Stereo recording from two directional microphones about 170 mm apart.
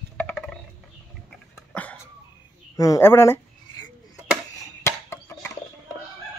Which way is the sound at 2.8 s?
15° left (ahead or behind).